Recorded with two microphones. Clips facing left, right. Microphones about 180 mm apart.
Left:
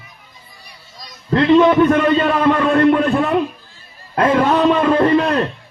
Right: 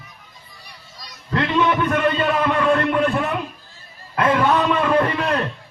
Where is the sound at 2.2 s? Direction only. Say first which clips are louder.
Left 4 dB; 40° left (ahead or behind).